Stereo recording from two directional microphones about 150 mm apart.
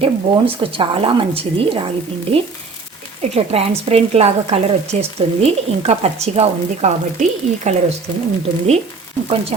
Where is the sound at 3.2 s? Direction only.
45° right (ahead or behind).